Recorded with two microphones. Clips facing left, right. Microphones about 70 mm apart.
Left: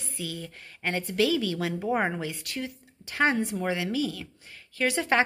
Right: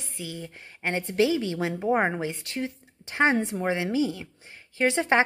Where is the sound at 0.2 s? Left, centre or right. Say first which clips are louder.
Even; centre.